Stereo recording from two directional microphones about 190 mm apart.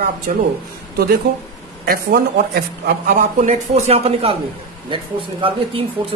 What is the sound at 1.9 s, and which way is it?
Speech, 55° right (ahead or behind).